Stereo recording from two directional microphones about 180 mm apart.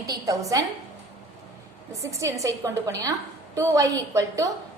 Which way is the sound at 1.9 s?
15° right (ahead or behind).